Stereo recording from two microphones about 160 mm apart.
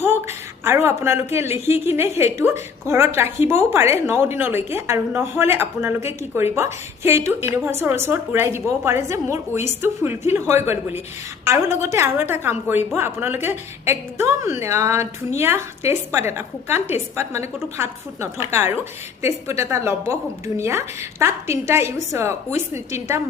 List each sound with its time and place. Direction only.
0.0 s a woman's voice: 15° right (ahead or behind)